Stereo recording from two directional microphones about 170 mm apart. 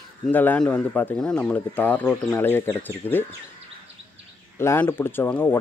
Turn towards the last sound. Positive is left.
turn(degrees=10)  # may be behind; listen again after turning